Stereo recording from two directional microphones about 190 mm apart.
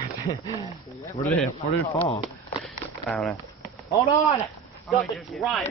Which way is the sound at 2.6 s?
5° left (ahead or behind).